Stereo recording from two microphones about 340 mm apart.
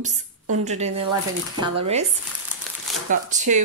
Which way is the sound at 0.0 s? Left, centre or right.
Right.